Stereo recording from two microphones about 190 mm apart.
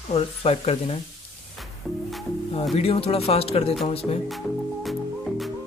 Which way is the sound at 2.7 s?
30° left (ahead or behind).